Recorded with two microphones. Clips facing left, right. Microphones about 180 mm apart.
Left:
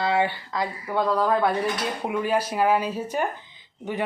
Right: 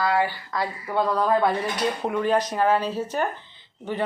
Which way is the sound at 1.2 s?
Centre (ahead or behind).